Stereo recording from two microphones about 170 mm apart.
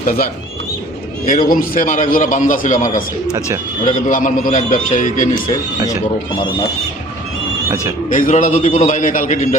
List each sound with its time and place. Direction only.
0.0 s speech: 60° left (ahead or behind)
1.3 s a man's voice: 55° left (ahead or behind)
8.1 s a man's voice: 50° left (ahead or behind)